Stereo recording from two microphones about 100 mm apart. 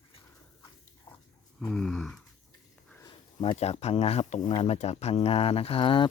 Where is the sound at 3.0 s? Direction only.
40° left (ahead or behind).